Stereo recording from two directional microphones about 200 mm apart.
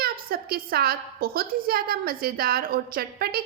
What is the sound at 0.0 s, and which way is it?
A woman's voice, 50° right (ahead or behind).